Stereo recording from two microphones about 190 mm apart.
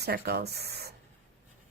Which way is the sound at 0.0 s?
55° right (ahead or behind).